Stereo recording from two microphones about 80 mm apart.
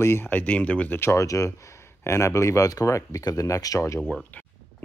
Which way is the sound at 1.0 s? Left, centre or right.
Left.